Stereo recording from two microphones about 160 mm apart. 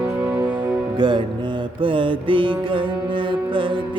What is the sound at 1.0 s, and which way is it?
Music, 30° right (ahead or behind).